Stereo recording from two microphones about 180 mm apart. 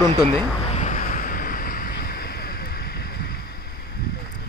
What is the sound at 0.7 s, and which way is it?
Vehicle, 40° left (ahead or behind).